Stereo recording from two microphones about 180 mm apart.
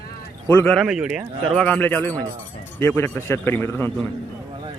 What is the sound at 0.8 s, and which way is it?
Speech, 5° right (ahead or behind).